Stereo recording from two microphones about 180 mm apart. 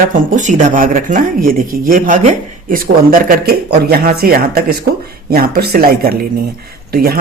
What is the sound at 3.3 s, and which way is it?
Speech, 55° right (ahead or behind).